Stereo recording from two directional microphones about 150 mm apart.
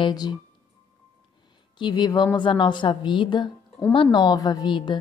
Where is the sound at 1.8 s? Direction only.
30° left (ahead or behind).